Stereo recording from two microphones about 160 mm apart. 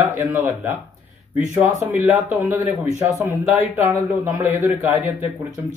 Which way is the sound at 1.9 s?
10° right (ahead or behind).